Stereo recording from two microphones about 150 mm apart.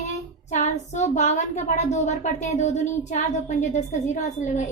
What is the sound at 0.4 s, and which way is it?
A woman's voice, 50° left (ahead or behind).